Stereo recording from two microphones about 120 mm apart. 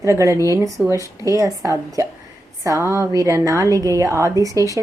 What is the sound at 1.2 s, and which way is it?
A woman's voice, 25° right (ahead or behind).